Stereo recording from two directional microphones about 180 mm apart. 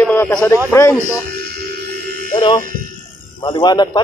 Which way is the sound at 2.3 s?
25° left (ahead or behind).